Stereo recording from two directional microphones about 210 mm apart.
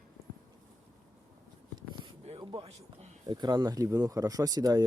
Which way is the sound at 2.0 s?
25° right (ahead or behind).